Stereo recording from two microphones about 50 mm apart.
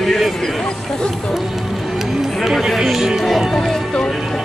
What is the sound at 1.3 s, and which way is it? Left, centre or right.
Music, centre.